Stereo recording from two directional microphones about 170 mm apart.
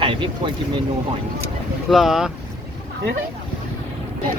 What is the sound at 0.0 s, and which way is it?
Vehicle, 30° right (ahead or behind).